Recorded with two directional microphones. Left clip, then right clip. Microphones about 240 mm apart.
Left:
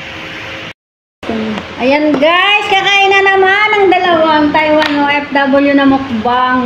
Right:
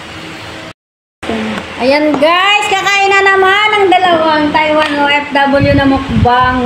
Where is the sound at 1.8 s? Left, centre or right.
Centre.